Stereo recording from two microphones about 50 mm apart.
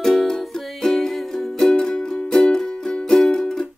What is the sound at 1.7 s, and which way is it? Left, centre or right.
Music, centre.